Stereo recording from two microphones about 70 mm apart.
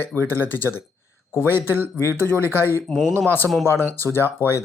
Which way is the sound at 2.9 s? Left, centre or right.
Centre.